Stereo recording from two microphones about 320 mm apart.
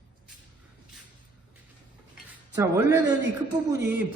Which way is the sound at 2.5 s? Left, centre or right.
Centre.